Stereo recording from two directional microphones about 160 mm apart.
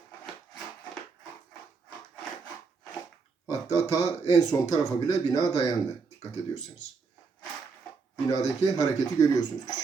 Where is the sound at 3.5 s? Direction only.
20° left (ahead or behind).